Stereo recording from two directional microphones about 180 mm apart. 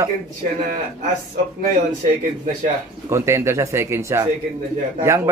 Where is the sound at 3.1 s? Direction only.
15° right (ahead or behind).